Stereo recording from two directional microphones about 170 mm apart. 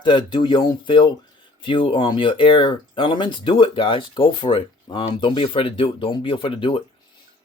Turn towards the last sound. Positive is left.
turn(degrees=30)  # may be behind; listen again after turning